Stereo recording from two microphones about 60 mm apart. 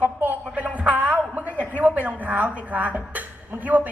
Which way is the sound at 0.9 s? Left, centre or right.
Right.